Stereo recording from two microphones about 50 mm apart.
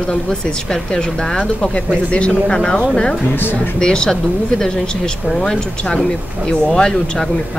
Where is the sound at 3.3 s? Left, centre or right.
Left.